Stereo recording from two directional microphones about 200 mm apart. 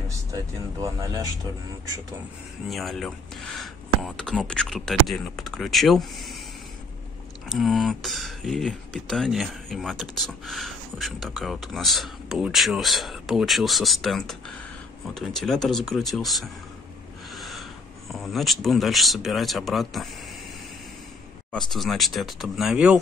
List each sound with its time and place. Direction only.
0.9 s speech: 15° right (ahead or behind)
2.7 s speech: centre (ahead or behind)
7.4 s speech: centre (ahead or behind)
17.3 s owl: centre (ahead or behind)
18.1 s speech: centre (ahead or behind)
21.5 s speech: centre (ahead or behind)